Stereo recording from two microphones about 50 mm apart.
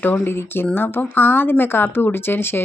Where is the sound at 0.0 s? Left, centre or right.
Left.